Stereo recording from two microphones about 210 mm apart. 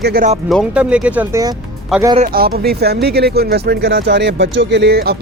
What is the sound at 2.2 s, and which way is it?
Speech, 45° right (ahead or behind).